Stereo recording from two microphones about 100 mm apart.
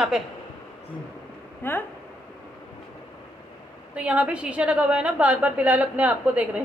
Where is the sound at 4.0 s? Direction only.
15° right (ahead or behind).